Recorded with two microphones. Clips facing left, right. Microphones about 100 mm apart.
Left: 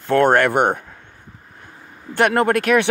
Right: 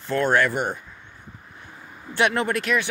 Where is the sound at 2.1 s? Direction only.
50° left (ahead or behind).